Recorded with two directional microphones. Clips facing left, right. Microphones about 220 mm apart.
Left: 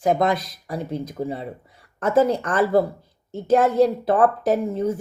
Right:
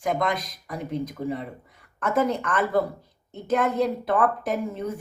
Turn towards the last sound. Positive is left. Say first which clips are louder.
# left 7 dB
turn(degrees=30)  # may be behind; listen again after turning